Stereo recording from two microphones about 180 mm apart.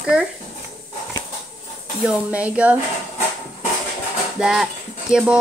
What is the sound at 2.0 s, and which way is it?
Speech, 5° right (ahead or behind).